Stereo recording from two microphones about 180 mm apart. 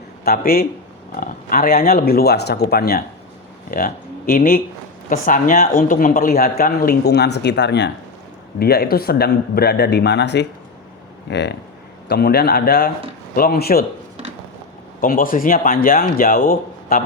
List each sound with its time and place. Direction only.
0.3 s speech: 55° left (ahead or behind)
8.5 s speech: 60° left (ahead or behind)
12.0 s speech: 60° left (ahead or behind)
15.0 s speech: 50° left (ahead or behind)